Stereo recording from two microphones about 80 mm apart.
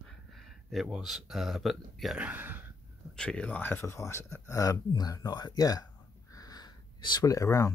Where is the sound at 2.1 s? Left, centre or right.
Centre.